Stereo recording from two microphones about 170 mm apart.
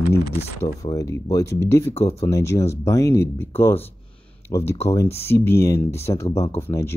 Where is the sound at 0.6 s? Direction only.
20° left (ahead or behind).